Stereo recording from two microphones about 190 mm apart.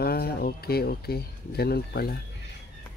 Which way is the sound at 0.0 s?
55° left (ahead or behind).